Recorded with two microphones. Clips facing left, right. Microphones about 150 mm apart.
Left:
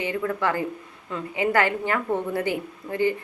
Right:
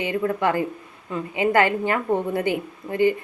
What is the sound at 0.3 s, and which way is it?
A woman's voice, 15° right (ahead or behind).